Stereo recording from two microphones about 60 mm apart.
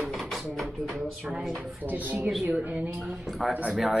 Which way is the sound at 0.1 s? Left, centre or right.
Centre.